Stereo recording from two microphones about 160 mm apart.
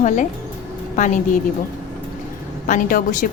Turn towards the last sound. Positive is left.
turn(degrees=55)  # may be behind; listen again after turning